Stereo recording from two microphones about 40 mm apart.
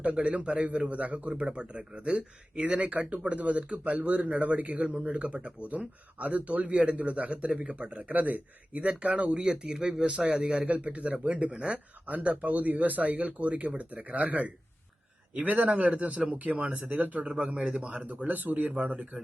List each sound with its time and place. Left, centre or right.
0.0 s a man's voice: right
8.1 s a man's voice: right
16.7 s speech: right
17.2 s a man's voice: right
18.7 s a man's voice: right